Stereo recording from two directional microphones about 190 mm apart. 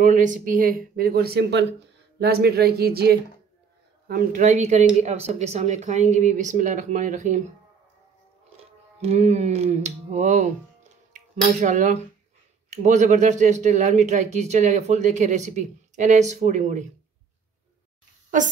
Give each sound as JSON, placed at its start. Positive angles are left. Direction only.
{"t": 0.0, "sound": "speech", "side_deg": -40}
{"t": 4.1, "sound": "speech", "side_deg": -40}
{"t": 8.5, "sound": "speech", "side_deg": -35}